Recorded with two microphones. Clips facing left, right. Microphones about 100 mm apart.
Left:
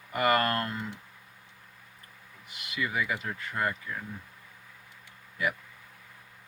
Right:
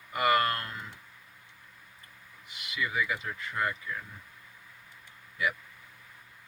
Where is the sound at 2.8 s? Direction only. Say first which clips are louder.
Left 1 dB; 40° left (ahead or behind).